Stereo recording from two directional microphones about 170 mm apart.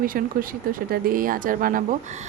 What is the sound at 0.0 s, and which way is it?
A child's voice, 55° right (ahead or behind).